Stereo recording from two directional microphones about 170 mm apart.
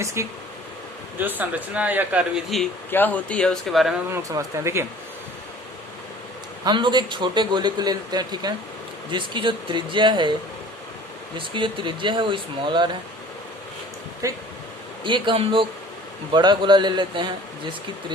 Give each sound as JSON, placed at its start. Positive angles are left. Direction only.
{"t": 0.0, "sound": "speech", "side_deg": -15}
{"t": 2.9, "sound": "speech", "side_deg": 10}
{"t": 4.1, "sound": "speech", "side_deg": -20}
{"t": 6.7, "sound": "a man's voice", "side_deg": -25}
{"t": 11.3, "sound": "a man's voice", "side_deg": -30}
{"t": 14.2, "sound": "speech", "side_deg": -20}
{"t": 15.0, "sound": "a man's voice", "side_deg": -30}